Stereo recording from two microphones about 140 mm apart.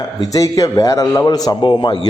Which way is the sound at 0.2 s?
25° left (ahead or behind).